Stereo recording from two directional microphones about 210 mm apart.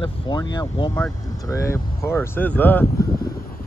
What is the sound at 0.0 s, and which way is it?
Speech, 20° left (ahead or behind).